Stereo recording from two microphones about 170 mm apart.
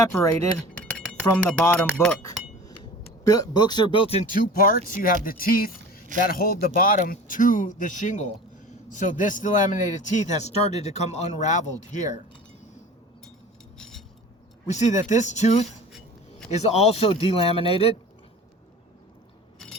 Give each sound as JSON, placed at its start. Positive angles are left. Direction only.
{"t": 0.0, "sound": "speech", "side_deg": 15}
{"t": 3.2, "sound": "speech", "side_deg": 20}
{"t": 4.3, "sound": "a man's voice", "side_deg": 55}
{"t": 13.7, "sound": "a sound", "side_deg": 5}
{"t": 14.7, "sound": "a man's voice", "side_deg": 45}